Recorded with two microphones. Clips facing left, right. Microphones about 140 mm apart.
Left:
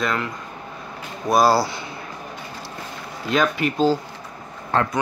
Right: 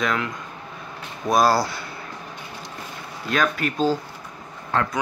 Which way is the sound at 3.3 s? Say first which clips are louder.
Left 3 dB; 10° left (ahead or behind).